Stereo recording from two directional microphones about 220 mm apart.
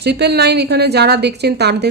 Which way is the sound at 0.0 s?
50° right (ahead or behind).